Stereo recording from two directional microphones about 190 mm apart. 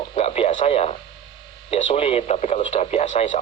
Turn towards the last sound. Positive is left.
turn(degrees=35)  # may be behind; listen again after turning